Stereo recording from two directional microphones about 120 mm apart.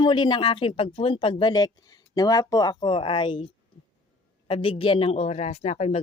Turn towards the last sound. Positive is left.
turn(degrees=65)  # may be behind; listen again after turning